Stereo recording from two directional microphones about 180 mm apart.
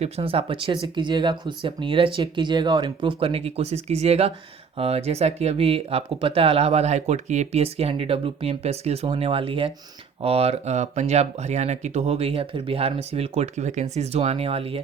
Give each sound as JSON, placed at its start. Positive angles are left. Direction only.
{"t": 0.0, "sound": "speech", "side_deg": -35}